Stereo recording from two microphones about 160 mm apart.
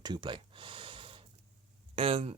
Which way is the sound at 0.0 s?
30° right (ahead or behind).